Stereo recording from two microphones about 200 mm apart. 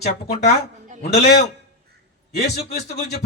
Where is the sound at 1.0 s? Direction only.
50° left (ahead or behind).